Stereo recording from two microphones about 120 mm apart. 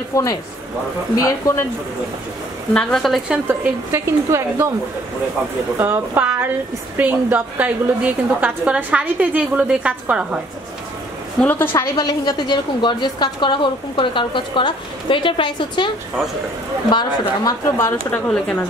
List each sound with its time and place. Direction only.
0.1 s speech: 25° left (ahead or behind)
2.7 s speech: 5° left (ahead or behind)
3.3 s speech: 20° right (ahead or behind)
5.8 s a woman's voice: 15° right (ahead or behind)
11.4 s speech: 20° left (ahead or behind)
12.0 s a woman's voice: 35° left (ahead or behind)
16.9 s a woman's voice: 40° left (ahead or behind)
17.6 s speech: 20° left (ahead or behind)